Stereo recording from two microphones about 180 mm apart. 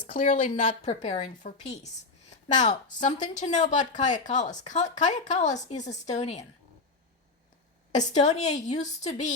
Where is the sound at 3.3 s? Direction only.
40° left (ahead or behind).